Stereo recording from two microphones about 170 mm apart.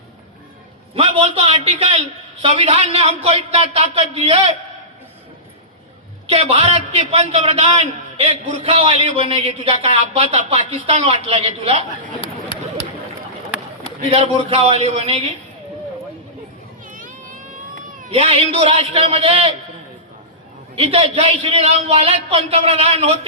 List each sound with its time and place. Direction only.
0.9 s a man's voice: 35° right (ahead or behind)
6.2 s a man's voice: 35° right (ahead or behind)
14.1 s a man's voice: 35° right (ahead or behind)
16.8 s children playing: 50° right (ahead or behind)
18.1 s a man's voice: 35° right (ahead or behind)
20.7 s a man's voice: 35° right (ahead or behind)